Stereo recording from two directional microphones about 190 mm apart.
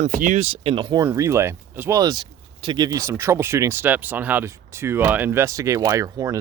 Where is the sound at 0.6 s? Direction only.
25° right (ahead or behind).